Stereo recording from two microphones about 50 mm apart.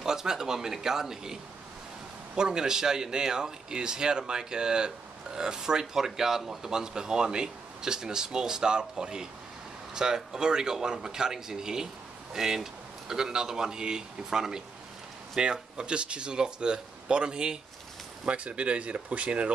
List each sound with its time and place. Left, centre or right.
0.0 s a man's voice: centre